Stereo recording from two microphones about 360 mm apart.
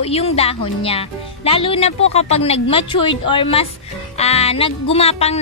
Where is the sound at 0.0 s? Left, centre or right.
Centre.